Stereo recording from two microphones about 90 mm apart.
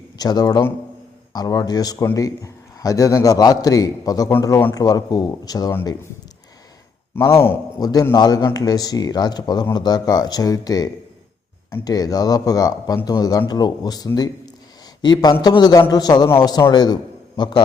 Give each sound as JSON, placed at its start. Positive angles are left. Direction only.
{"t": 0.2, "sound": "a man's voice", "side_deg": 45}
{"t": 7.2, "sound": "a man's voice", "side_deg": 30}
{"t": 7.8, "sound": "a man's voice", "side_deg": 50}